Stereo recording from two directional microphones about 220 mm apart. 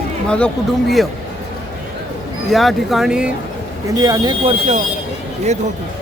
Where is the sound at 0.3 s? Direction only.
5° left (ahead or behind).